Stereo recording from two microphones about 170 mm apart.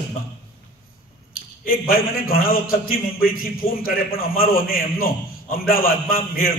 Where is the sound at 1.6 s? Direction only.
60° left (ahead or behind).